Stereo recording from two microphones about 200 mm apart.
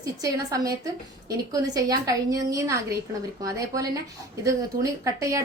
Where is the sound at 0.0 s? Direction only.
15° right (ahead or behind).